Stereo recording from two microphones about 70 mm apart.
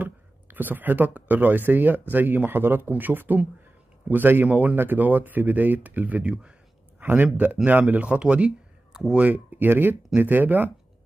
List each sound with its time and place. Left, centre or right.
0.0 s speech: right
7.0 s a sound: right
7.9 s speech: centre
9.1 s speech: right